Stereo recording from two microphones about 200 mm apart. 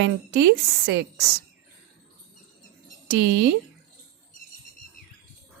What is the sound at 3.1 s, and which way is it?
Speech, 55° right (ahead or behind).